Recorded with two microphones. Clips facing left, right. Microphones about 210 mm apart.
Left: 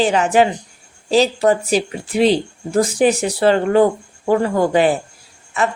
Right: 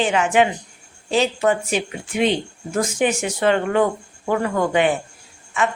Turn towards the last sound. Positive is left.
turn(degrees=35)  # may be behind; listen again after turning